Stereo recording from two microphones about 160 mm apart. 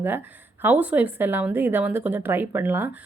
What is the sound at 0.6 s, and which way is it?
A woman's voice, 10° right (ahead or behind).